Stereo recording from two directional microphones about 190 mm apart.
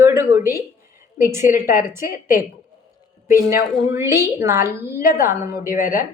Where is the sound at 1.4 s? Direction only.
45° left (ahead or behind).